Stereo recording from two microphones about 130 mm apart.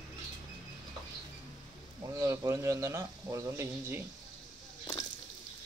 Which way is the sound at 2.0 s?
25° right (ahead or behind).